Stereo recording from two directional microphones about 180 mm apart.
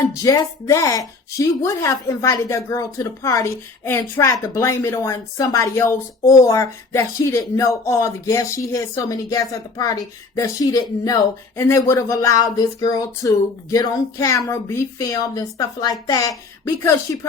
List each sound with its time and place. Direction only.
0.1 s speech: 20° left (ahead or behind)